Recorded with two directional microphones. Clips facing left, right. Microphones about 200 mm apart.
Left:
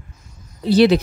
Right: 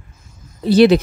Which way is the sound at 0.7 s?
50° right (ahead or behind).